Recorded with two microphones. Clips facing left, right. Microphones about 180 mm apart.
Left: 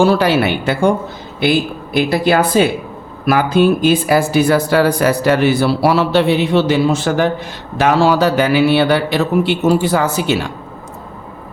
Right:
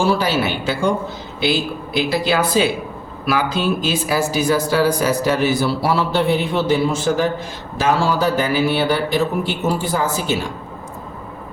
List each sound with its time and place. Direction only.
0.0 s a man's voice: 60° left (ahead or behind)